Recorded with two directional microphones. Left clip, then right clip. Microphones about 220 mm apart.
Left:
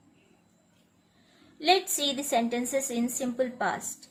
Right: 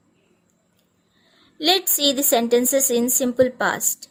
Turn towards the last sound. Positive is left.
turn(degrees=-50)  # may be behind; listen again after turning